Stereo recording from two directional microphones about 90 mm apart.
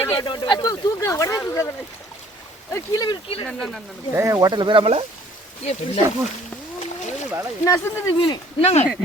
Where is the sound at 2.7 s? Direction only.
45° left (ahead or behind).